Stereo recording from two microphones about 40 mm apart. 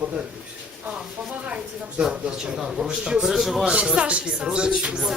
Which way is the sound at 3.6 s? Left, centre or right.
Right.